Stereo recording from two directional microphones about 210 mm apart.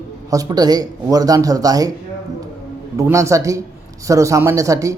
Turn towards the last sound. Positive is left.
turn(degrees=-15)  # may be behind; listen again after turning